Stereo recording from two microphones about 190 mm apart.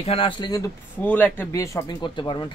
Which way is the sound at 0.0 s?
30° left (ahead or behind).